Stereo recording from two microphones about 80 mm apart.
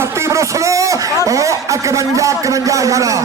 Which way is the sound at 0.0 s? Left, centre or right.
Right.